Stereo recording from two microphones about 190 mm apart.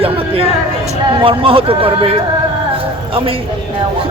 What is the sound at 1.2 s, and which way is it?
Speech, 25° right (ahead or behind).